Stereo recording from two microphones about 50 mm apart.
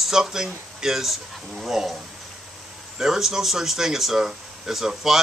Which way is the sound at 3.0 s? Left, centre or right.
Centre.